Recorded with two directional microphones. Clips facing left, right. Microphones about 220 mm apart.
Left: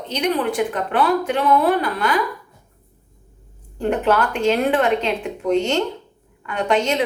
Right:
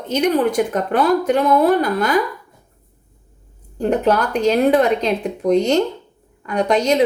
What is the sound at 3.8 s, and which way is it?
A woman's voice, 40° right (ahead or behind).